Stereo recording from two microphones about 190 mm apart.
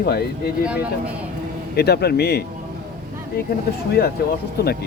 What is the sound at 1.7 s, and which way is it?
Speech, 60° left (ahead or behind).